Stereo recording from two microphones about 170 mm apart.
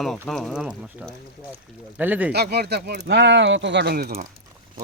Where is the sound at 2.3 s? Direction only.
70° right (ahead or behind).